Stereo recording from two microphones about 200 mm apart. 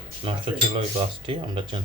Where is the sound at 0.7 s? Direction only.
25° right (ahead or behind).